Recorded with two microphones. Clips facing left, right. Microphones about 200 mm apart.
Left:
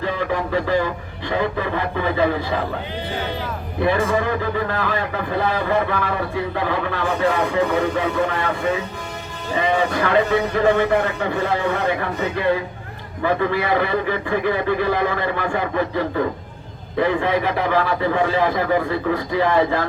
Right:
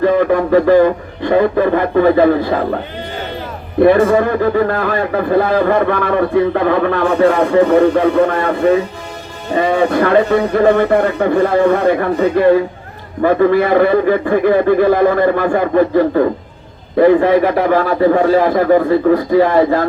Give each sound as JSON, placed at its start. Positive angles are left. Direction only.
{"t": 0.0, "sound": "a man's voice", "side_deg": -50}
{"t": 3.8, "sound": "a man's voice", "side_deg": -60}